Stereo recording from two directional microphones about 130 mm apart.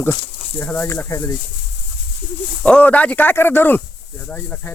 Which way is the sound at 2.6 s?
10° left (ahead or behind).